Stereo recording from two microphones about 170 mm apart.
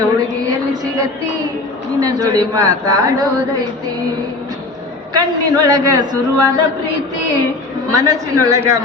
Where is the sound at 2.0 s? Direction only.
20° right (ahead or behind).